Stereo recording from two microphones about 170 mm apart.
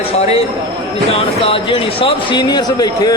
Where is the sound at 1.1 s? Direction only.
30° left (ahead or behind).